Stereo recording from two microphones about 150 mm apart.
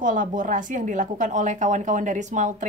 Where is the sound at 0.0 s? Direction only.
60° right (ahead or behind).